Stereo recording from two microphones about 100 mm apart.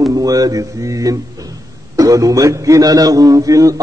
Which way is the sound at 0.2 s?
35° right (ahead or behind).